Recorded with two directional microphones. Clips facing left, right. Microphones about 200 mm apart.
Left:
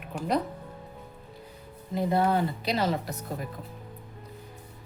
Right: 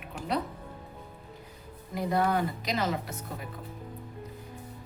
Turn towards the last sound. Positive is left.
turn(degrees=35)  # may be behind; listen again after turning